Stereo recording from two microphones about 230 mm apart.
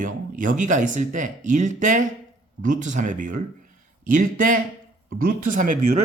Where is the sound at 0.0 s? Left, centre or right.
Right.